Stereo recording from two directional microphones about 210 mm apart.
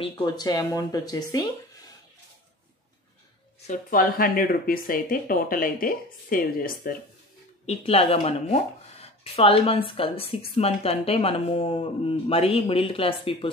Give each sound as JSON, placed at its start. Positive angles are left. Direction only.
{"t": 0.0, "sound": "speech", "side_deg": 20}
{"t": 3.6, "sound": "speech", "side_deg": 40}
{"t": 7.6, "sound": "speech", "side_deg": 30}